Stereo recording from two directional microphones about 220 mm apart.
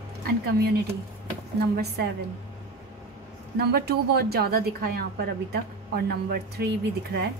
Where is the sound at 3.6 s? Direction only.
45° right (ahead or behind).